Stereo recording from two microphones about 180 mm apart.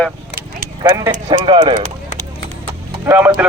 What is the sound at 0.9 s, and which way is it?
Speech, 15° right (ahead or behind).